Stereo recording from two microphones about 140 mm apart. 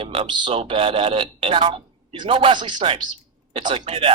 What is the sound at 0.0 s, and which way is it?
Speech, 40° right (ahead or behind).